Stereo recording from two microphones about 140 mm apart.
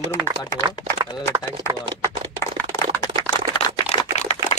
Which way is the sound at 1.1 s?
25° left (ahead or behind).